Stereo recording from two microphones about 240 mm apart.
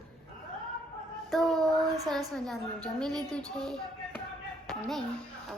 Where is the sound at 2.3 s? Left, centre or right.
Centre.